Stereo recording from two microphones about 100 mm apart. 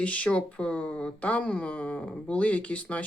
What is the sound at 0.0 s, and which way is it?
Speech, 15° left (ahead or behind).